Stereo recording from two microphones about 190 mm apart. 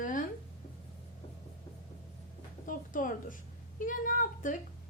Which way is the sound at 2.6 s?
45° left (ahead or behind).